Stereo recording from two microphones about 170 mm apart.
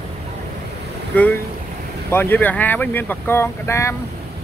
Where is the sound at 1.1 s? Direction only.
10° left (ahead or behind).